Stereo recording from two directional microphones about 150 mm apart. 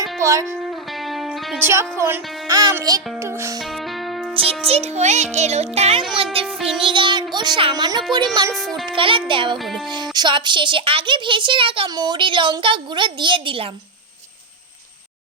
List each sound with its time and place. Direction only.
0.2 s music: 20° right (ahead or behind)
0.6 s music: centre (ahead or behind)
1.5 s speech: 15° right (ahead or behind)
2.6 s music: 25° right (ahead or behind)
3.6 s music: centre (ahead or behind)
4.4 s a woman's voice: 40° right (ahead or behind)
8.4 s music: 25° right (ahead or behind)
8.9 s a woman's voice: 35° right (ahead or behind)